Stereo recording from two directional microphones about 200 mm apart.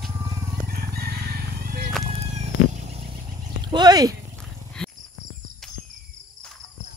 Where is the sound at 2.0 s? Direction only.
35° right (ahead or behind).